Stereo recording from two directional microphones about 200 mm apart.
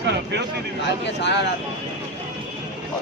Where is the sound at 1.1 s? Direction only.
60° left (ahead or behind).